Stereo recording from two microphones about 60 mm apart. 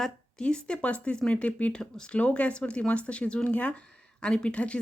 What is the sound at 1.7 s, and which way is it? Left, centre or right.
Speech, centre.